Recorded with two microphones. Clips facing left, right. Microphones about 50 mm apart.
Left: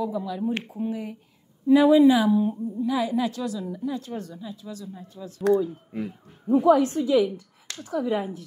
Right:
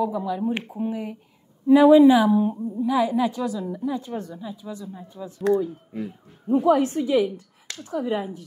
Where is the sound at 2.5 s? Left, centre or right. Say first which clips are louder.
Right 3 dB; right.